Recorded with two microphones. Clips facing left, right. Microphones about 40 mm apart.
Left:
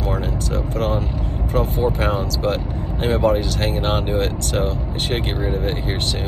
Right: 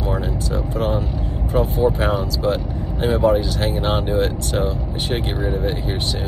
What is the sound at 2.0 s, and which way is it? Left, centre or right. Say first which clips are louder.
Speech: right 1 dB; left.